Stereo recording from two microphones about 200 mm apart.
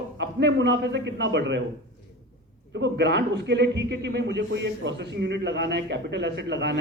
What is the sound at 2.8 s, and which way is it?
A man's voice, 60° right (ahead or behind).